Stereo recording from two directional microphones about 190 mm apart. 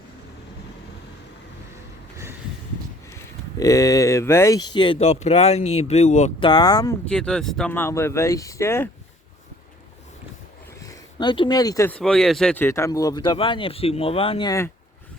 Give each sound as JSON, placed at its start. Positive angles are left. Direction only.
{"t": 3.6, "sound": "speech", "side_deg": 20}
{"t": 6.4, "sound": "speech", "side_deg": 25}
{"t": 7.0, "sound": "speech", "side_deg": 5}
{"t": 10.8, "sound": "speech", "side_deg": 25}